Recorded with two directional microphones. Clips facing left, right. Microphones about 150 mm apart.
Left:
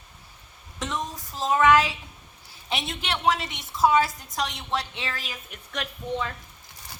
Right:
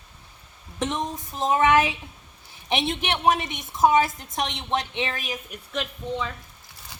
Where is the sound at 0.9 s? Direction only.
25° right (ahead or behind).